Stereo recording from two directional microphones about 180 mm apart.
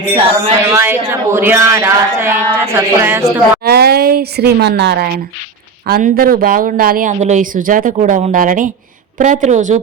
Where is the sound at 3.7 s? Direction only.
60° right (ahead or behind).